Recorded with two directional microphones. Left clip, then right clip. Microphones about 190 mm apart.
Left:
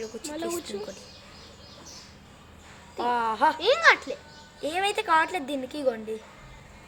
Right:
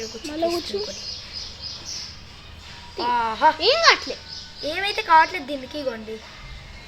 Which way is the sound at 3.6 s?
20° right (ahead or behind).